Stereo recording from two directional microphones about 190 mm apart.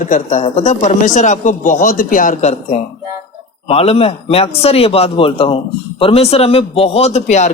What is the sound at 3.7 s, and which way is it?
Speech, 30° left (ahead or behind).